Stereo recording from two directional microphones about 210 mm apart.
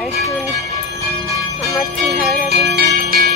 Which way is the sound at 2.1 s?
50° right (ahead or behind).